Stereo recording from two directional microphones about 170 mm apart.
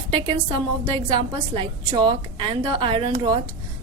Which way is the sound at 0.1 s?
35° right (ahead or behind).